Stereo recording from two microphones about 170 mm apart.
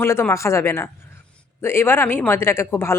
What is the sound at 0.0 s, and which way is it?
A woman's voice, 15° left (ahead or behind).